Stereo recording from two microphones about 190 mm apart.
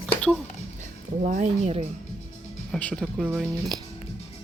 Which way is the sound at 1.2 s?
40° right (ahead or behind).